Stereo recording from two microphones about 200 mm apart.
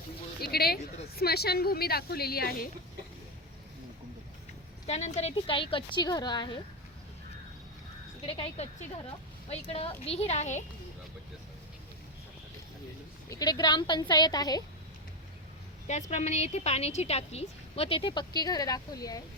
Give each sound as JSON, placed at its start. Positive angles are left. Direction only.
{"t": 0.4, "sound": "a woman's voice", "side_deg": 50}
{"t": 4.9, "sound": "speech", "side_deg": 35}
{"t": 8.3, "sound": "a woman's voice", "side_deg": 30}
{"t": 13.3, "sound": "speech", "side_deg": 20}
{"t": 15.9, "sound": "a woman's voice", "side_deg": 35}